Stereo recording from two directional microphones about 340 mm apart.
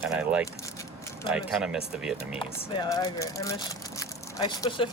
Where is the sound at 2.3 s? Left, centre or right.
Centre.